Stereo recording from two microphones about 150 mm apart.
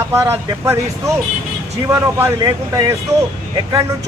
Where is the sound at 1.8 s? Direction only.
15° right (ahead or behind).